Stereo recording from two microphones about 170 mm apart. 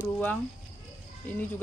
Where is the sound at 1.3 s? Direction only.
10° left (ahead or behind).